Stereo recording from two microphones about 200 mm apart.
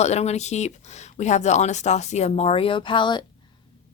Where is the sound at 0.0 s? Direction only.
35° left (ahead or behind).